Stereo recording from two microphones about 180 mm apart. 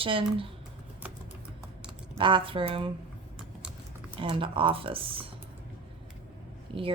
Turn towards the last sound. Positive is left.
turn(degrees=-30)  # may be behind; listen again after turning